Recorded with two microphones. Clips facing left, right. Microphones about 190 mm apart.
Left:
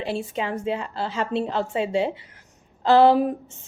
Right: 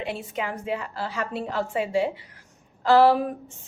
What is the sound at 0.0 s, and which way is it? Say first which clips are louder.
Speech: left 3 dB; 30° left (ahead or behind).